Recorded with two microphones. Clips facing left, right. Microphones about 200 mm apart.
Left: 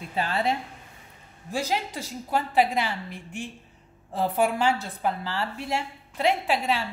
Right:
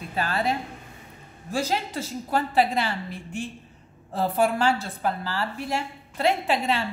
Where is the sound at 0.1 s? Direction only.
25° left (ahead or behind).